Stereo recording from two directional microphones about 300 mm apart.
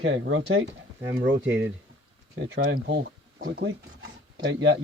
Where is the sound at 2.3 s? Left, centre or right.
Right.